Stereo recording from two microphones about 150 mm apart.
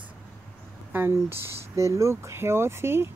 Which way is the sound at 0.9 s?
15° right (ahead or behind).